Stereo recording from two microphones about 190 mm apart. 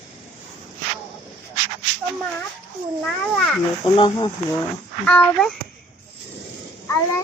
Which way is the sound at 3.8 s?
25° left (ahead or behind).